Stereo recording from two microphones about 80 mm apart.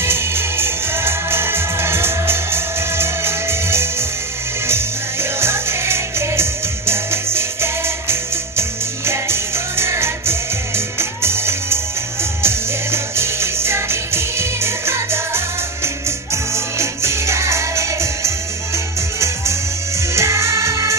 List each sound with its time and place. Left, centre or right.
0.0 s music: right
5.4 s music: right